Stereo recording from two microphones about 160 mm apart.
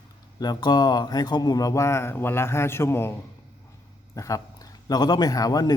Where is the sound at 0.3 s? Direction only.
25° left (ahead or behind).